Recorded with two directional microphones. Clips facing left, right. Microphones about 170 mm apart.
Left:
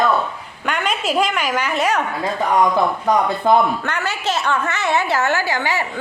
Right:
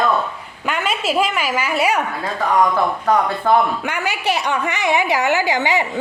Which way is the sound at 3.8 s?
10° right (ahead or behind).